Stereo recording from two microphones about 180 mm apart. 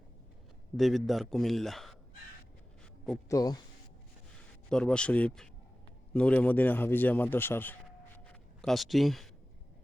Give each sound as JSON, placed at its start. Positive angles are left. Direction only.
{"t": 0.8, "sound": "a man's voice", "side_deg": 0}
{"t": 3.2, "sound": "a man's voice", "side_deg": 20}
{"t": 4.7, "sound": "a man's voice", "side_deg": 5}